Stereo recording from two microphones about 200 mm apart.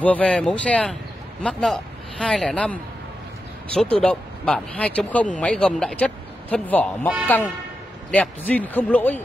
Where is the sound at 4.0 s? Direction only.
5° left (ahead or behind).